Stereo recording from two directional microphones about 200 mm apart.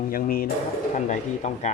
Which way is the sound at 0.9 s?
35° left (ahead or behind).